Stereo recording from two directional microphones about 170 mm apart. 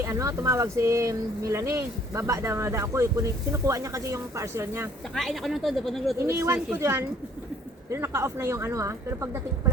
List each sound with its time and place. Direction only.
0.0 s speech: 15° right (ahead or behind)
5.1 s speech: centre (ahead or behind)
6.2 s speech: 15° right (ahead or behind)